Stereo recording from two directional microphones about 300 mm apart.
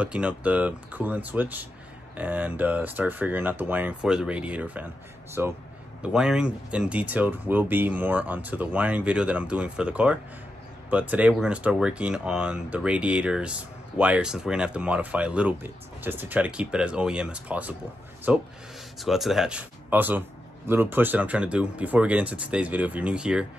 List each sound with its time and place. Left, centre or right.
0.0 s speech: centre